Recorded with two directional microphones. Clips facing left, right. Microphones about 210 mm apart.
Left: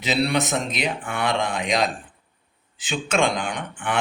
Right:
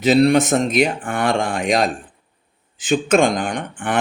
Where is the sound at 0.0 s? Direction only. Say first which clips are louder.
Right 9 dB; 45° right (ahead or behind).